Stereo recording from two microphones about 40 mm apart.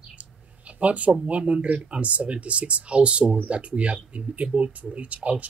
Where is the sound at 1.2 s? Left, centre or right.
Right.